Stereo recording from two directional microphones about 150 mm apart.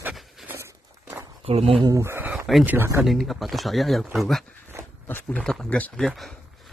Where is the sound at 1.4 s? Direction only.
40° right (ahead or behind).